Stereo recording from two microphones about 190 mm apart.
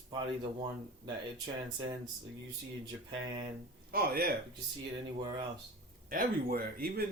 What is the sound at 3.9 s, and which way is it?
Speech, 50° right (ahead or behind).